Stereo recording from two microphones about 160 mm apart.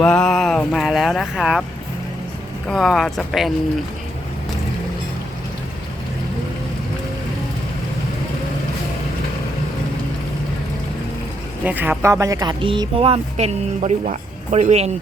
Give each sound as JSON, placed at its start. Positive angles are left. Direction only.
{"t": 0.0, "sound": "speech", "side_deg": 5}
{"t": 2.6, "sound": "speech", "side_deg": 0}
{"t": 11.6, "sound": "speech", "side_deg": -10}